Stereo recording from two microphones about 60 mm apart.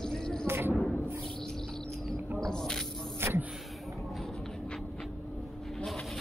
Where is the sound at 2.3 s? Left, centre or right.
Centre.